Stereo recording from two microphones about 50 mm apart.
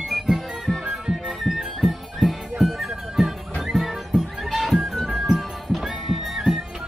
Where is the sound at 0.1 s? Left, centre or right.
Centre.